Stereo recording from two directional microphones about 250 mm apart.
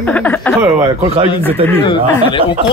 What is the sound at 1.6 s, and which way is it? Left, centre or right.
Speech, centre.